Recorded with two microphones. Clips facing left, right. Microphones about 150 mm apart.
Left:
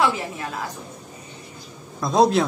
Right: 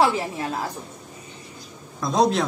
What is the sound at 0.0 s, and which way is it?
Speech, 30° right (ahead or behind).